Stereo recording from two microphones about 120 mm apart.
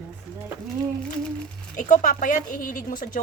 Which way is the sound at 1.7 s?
90° left.